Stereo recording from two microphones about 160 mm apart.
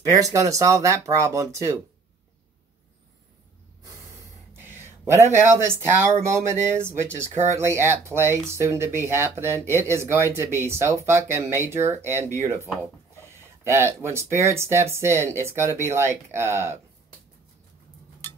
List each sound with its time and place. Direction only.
0.2 s speech: 20° right (ahead or behind)
4.6 s speech: 15° right (ahead or behind)
13.7 s speech: 15° right (ahead or behind)